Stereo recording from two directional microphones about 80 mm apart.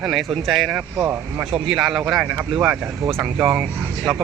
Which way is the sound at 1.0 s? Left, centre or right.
Centre.